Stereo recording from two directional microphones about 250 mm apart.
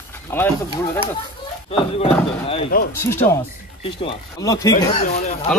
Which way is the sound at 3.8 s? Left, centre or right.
Left.